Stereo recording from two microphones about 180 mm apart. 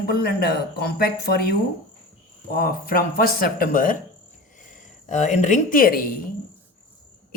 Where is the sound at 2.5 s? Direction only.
50° left (ahead or behind).